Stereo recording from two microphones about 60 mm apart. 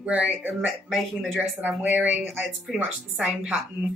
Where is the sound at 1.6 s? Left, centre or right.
Right.